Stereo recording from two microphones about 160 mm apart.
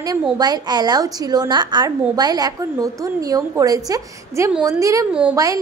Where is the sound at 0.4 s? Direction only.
25° right (ahead or behind).